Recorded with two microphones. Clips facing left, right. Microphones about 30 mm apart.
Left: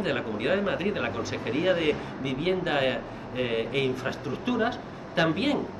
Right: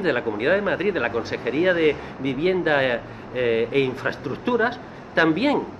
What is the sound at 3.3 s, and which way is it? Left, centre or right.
Speech, centre.